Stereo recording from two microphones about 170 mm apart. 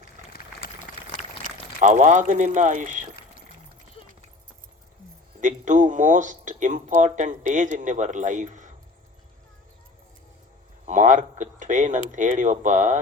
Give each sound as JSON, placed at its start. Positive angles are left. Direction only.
{"t": 0.6, "sound": "a sound", "side_deg": 55}
{"t": 1.8, "sound": "speech", "side_deg": -45}
{"t": 5.4, "sound": "speech", "side_deg": -50}
{"t": 10.8, "sound": "speech", "side_deg": -45}